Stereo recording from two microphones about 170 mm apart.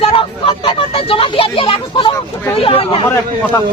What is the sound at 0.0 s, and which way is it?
Speech, 30° left (ahead or behind).